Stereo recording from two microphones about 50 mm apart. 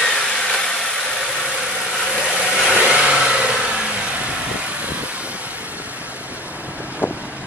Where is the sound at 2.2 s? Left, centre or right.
Centre.